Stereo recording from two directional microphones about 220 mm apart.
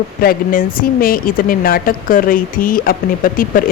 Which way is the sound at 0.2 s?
40° left (ahead or behind).